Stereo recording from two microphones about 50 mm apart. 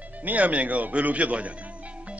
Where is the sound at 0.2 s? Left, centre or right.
Right.